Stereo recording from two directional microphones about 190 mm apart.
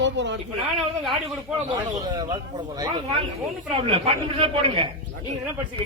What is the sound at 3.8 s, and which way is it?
Speech, 30° right (ahead or behind).